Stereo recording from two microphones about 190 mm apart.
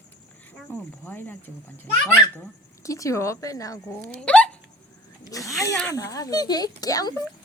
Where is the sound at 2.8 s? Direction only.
15° left (ahead or behind).